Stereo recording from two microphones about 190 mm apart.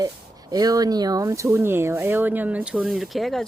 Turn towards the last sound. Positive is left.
turn(degrees=0)  # may be behind; listen again after turning